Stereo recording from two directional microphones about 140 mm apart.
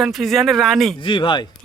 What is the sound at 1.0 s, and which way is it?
Speech, 35° left (ahead or behind).